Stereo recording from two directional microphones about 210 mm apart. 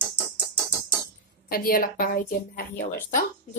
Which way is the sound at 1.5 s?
45° left (ahead or behind).